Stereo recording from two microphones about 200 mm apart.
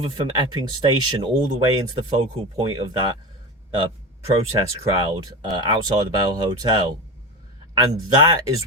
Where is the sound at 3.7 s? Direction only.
25° right (ahead or behind).